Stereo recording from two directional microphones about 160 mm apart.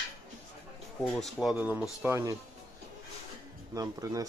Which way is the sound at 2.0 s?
15° right (ahead or behind).